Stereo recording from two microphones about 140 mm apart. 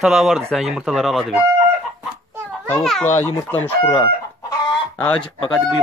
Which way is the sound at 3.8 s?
25° left (ahead or behind).